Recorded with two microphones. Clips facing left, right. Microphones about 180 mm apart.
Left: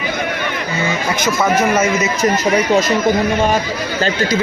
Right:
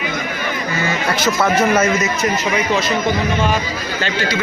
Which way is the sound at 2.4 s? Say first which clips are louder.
Left 4 dB; 40° left (ahead or behind).